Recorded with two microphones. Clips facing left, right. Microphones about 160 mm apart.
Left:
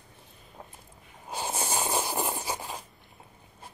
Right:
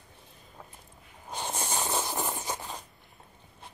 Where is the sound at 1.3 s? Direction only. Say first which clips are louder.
Left 2 dB; 5° left (ahead or behind).